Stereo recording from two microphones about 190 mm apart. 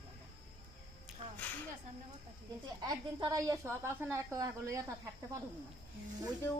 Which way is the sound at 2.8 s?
20° right (ahead or behind).